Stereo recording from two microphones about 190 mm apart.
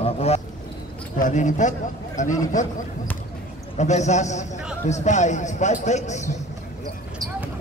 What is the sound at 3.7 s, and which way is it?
A man's voice, 35° left (ahead or behind).